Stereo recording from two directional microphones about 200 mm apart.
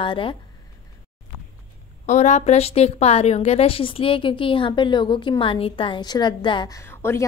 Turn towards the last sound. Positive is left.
turn(degrees=15)  # may be behind; listen again after turning